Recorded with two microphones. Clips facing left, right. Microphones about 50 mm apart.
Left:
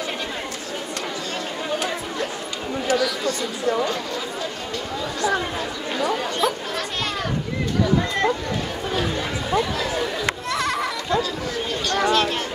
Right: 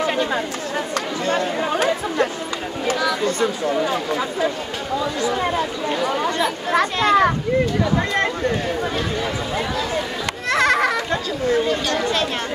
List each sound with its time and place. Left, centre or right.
1.2 s chatter: right
6.4 s a child's voice: right
10.5 s children playing: right
11.9 s speech: left